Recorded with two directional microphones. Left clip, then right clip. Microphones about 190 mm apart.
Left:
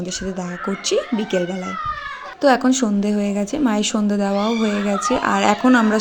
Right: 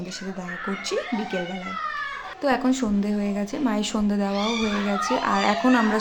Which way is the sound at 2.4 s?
25° left (ahead or behind).